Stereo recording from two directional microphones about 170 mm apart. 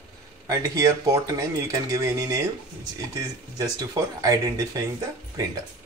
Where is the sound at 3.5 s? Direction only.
25° right (ahead or behind).